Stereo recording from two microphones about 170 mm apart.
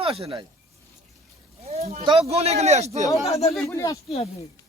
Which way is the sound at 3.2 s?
35° left (ahead or behind).